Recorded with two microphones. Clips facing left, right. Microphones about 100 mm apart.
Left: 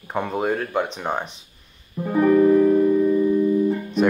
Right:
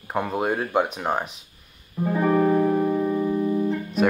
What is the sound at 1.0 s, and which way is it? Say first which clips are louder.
Speech: right 1 dB; 5° right (ahead or behind).